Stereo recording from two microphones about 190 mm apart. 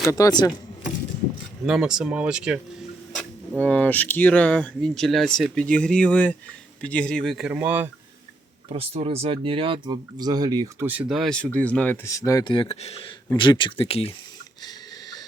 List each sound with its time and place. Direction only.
0.1 s speech: 20° left (ahead or behind)
1.6 s speech: 5° right (ahead or behind)
3.6 s speech: 10° left (ahead or behind); by 7.9 s 10° right (ahead or behind)
8.7 s speech: 30° right (ahead or behind); by 14.1 s 30° left (ahead or behind)